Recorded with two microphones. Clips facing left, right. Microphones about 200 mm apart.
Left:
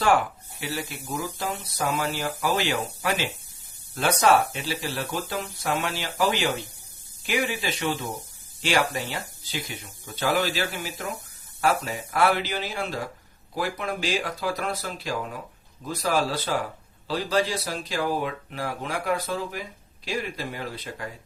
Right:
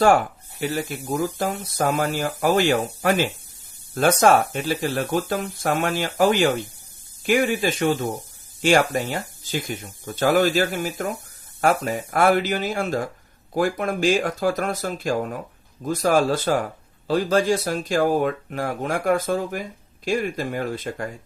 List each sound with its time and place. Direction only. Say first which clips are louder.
0.0 s speech: right 5 dB; 45° right (ahead or behind)